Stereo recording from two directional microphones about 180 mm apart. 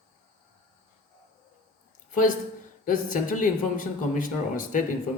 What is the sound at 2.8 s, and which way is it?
Speech, 50° left (ahead or behind).